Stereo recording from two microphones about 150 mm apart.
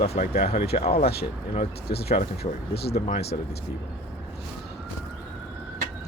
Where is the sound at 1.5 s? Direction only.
90° left.